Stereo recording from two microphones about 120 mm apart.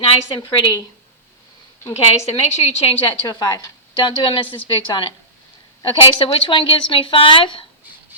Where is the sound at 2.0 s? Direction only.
60° left (ahead or behind).